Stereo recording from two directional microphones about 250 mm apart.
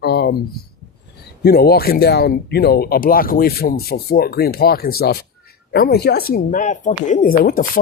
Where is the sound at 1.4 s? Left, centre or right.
Left.